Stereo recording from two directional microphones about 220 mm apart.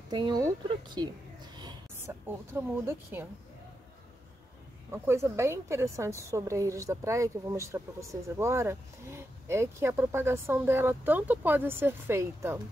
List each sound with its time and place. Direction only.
0.1 s speech: 20° right (ahead or behind)
4.9 s a woman's voice: 10° right (ahead or behind)